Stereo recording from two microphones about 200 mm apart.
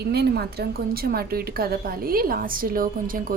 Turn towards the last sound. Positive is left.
turn(degrees=-45)  # may be behind; listen again after turning